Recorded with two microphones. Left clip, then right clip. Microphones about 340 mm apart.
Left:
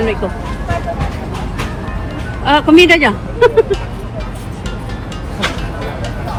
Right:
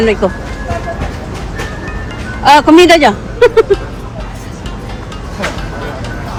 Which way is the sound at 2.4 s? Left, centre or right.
Centre.